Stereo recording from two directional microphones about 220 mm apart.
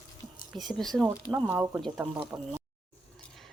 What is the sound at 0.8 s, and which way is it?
Speech, centre (ahead or behind).